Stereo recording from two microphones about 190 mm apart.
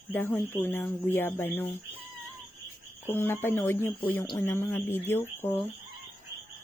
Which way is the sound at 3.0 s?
10° left (ahead or behind).